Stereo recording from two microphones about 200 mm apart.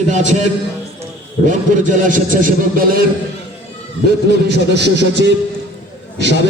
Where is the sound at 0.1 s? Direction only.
35° right (ahead or behind).